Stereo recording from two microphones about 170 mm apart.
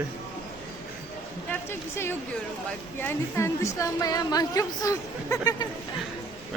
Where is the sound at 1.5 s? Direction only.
15° left (ahead or behind).